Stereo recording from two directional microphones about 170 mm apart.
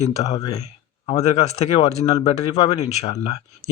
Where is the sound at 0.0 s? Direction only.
40° left (ahead or behind).